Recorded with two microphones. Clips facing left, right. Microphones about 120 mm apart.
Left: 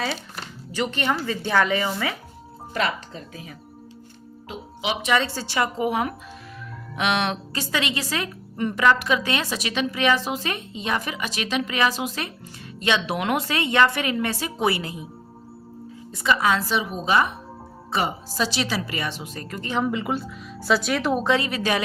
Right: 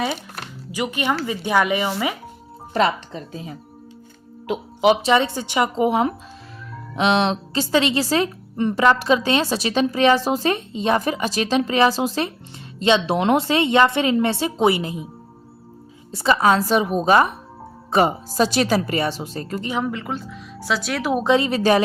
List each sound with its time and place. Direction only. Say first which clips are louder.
0.7 s speech: right 2 dB; 10° right (ahead or behind)
2.7 s a woman's voice: right 6 dB; 30° right (ahead or behind)
5.0 s a woman's voice: right 5 dB; 20° right (ahead or behind)
16.1 s speech: right 4 dB; 35° right (ahead or behind)
19.7 s speech: left 3 dB; 5° left (ahead or behind)
21.2 s a woman's voice: right 8 dB; 20° right (ahead or behind)
21.5 s speech: right 7 dB; 35° right (ahead or behind)